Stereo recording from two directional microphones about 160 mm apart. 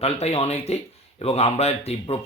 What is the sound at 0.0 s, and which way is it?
Speech, 40° left (ahead or behind).